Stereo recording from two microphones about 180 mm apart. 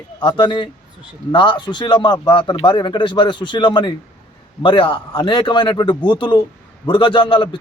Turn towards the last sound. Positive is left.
turn(degrees=25)  # may be behind; listen again after turning